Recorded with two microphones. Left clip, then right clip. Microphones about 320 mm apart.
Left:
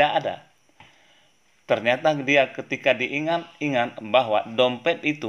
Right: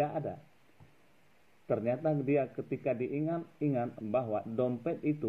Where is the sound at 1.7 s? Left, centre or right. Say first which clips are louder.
Left 11 dB; left.